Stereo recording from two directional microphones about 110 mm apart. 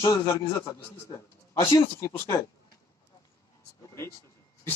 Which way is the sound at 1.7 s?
25° left (ahead or behind).